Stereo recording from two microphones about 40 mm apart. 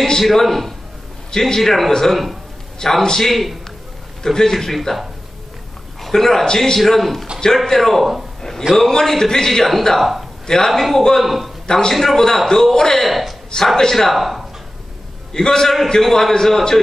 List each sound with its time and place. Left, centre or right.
0.2 s speech: centre
4.2 s speech: centre
4.7 s speech: centre
6.0 s a man's voice: centre
6.8 s speech: centre
8.4 s a sound: centre
8.7 s speech: centre
10.4 s a man's voice: centre
11.6 s a man's voice: centre
11.9 s speech: centre
13.0 s speech: centre
13.7 s speech: centre
14.1 s speech: centre
15.3 s speech: centre